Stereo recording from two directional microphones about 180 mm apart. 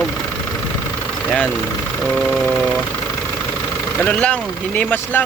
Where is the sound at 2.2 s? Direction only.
10° left (ahead or behind).